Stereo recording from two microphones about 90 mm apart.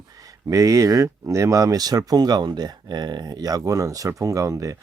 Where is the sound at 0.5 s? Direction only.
40° right (ahead or behind).